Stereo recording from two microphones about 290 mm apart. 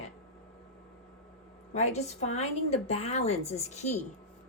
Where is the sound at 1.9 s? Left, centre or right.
Left.